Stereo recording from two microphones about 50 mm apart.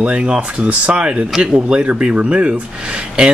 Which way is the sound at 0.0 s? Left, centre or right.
Right.